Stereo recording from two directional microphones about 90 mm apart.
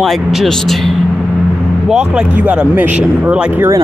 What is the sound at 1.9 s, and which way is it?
Speech, 10° right (ahead or behind).